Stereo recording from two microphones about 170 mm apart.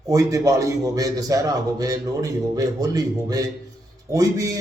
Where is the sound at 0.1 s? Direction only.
20° right (ahead or behind).